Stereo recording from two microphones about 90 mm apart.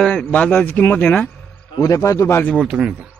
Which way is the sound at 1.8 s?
40° left (ahead or behind).